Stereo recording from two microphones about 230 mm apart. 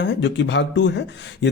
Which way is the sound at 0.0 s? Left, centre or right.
Left.